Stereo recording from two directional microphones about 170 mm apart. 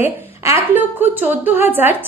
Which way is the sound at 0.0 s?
15° right (ahead or behind).